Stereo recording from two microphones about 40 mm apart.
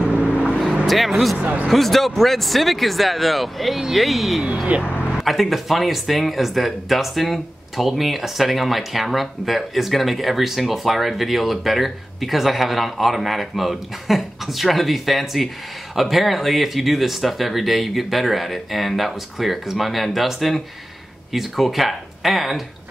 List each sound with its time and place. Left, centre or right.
0.8 s speech: centre
1.4 s speech: right
1.7 s speech: centre
4.7 s speech: right
5.1 s speech: centre